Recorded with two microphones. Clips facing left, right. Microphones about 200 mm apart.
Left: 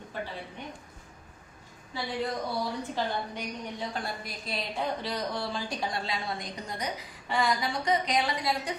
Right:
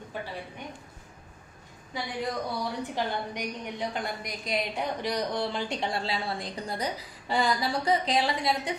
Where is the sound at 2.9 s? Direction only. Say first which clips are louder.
Right 1 dB; 15° right (ahead or behind).